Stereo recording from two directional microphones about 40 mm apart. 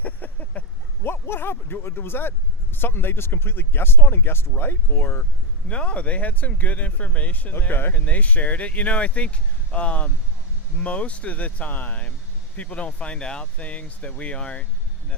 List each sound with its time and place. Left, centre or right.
0.0 s vehicle: left
1.0 s speech: left
5.6 s speech: left
7.7 s speech: left
7.9 s speech: left
12.5 s speech: left